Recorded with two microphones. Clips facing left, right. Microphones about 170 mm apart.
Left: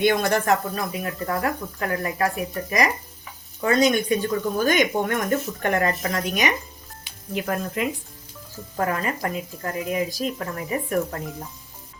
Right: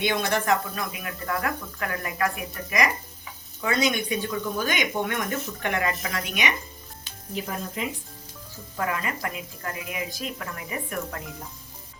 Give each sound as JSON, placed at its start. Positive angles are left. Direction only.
{"t": 0.0, "sound": "a woman's voice", "side_deg": 45}
{"t": 7.3, "sound": "speech", "side_deg": 70}
{"t": 8.7, "sound": "speech", "side_deg": 45}